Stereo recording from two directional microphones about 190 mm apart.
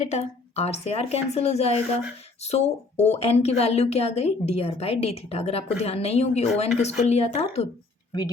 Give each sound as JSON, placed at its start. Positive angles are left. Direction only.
{"t": 0.0, "sound": "a woman's voice", "side_deg": 35}